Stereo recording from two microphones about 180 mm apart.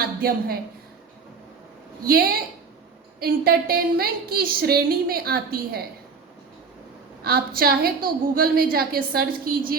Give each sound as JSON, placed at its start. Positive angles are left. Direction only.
{"t": 0.0, "sound": "a woman's voice", "side_deg": -55}
{"t": 2.0, "sound": "a woman's voice", "side_deg": -55}
{"t": 7.3, "sound": "a woman's voice", "side_deg": -55}